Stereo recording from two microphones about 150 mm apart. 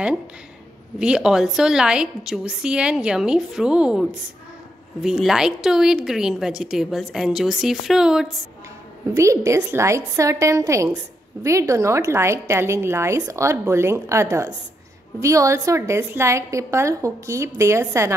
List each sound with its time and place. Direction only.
0.9 s a woman's voice: 5° right (ahead or behind)
9.1 s a woman's voice: 20° right (ahead or behind)